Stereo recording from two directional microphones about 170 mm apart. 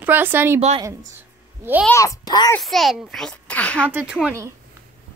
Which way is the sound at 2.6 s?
Centre (ahead or behind).